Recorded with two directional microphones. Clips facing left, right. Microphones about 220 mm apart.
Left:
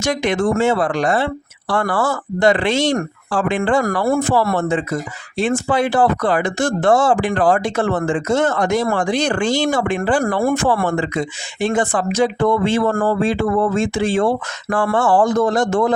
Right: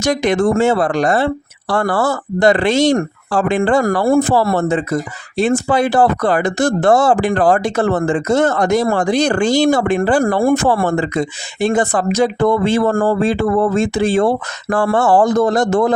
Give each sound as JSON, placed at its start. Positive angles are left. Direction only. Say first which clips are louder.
{"t": 0.0, "sound": "speech", "louder": "right 3 dB", "side_deg": -40}